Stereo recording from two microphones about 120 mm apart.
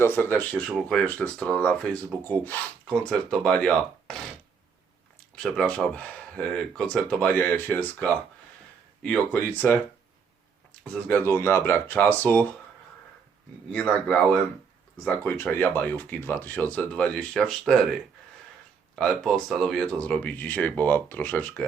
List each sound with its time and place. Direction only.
0.0 s speech: 15° left (ahead or behind)
5.4 s speech: 10° left (ahead or behind)
10.9 s speech: 15° left (ahead or behind)
13.7 s speech: 5° left (ahead or behind)
15.0 s speech: 15° left (ahead or behind)
18.9 s speech: 5° left (ahead or behind)